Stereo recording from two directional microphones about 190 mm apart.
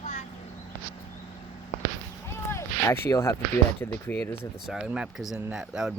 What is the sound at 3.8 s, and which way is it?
Speech, 10° left (ahead or behind).